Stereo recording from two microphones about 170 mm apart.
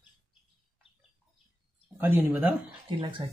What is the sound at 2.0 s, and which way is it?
Speech, 10° right (ahead or behind).